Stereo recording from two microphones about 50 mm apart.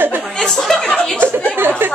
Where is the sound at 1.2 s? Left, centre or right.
Right.